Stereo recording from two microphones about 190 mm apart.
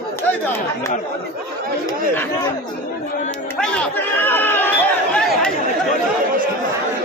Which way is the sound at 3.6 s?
5° left (ahead or behind).